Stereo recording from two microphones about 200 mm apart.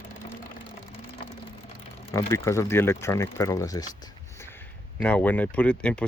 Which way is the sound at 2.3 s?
15° left (ahead or behind).